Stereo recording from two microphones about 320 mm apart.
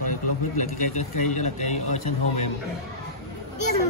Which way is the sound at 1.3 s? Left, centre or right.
Left.